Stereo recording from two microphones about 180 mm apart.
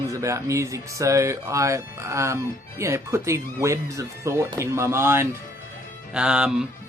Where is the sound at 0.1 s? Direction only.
15° right (ahead or behind).